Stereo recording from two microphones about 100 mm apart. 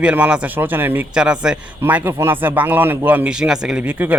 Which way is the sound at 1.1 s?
10° right (ahead or behind).